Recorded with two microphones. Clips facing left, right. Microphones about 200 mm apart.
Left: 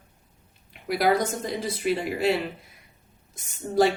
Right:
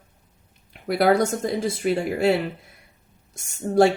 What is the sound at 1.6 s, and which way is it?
Speech, 45° right (ahead or behind).